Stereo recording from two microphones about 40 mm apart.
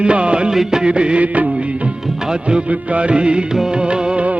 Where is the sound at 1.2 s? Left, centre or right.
Right.